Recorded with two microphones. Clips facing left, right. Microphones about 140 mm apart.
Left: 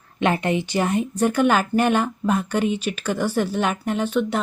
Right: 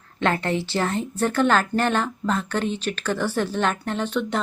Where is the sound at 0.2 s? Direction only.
15° left (ahead or behind).